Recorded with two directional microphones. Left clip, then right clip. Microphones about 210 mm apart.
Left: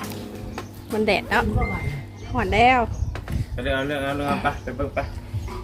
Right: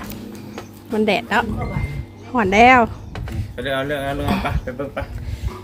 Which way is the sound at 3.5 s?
50° right (ahead or behind).